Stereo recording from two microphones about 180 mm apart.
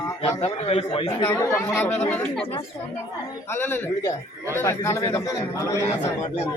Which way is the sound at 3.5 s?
10° left (ahead or behind).